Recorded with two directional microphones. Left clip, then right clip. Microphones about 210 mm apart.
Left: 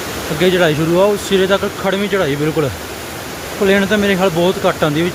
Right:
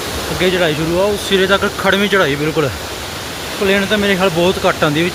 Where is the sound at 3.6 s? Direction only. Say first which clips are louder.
Left 1 dB; 25° left (ahead or behind).